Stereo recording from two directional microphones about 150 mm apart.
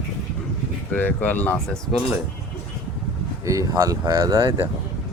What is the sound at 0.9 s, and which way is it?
Speech, 10° left (ahead or behind).